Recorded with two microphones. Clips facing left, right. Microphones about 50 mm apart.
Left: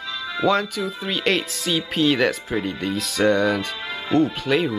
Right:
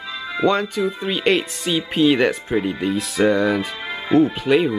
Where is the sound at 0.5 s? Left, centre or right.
Centre.